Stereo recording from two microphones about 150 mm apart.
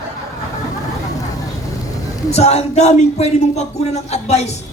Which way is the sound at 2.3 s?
45° left (ahead or behind).